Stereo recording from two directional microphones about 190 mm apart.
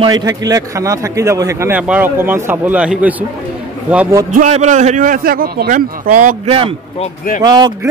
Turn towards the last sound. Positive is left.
turn(degrees=-20)  # may be behind; listen again after turning